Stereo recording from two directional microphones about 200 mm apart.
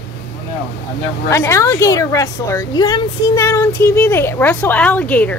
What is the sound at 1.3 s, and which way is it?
A woman's voice, 15° left (ahead or behind).